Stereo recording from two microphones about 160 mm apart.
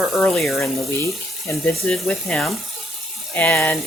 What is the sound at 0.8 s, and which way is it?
Speech, 15° left (ahead or behind).